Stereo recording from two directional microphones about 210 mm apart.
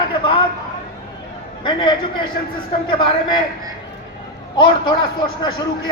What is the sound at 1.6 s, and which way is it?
Speech, 20° left (ahead or behind).